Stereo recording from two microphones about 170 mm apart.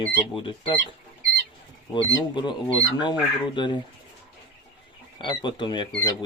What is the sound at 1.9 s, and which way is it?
Speech, 25° left (ahead or behind).